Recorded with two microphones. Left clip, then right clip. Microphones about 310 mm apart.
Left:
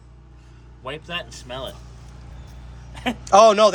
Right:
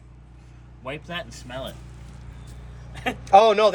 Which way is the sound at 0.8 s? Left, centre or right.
Left.